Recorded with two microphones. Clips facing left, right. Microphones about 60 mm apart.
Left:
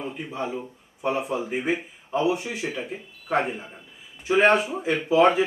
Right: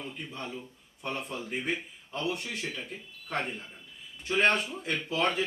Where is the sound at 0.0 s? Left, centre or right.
Centre.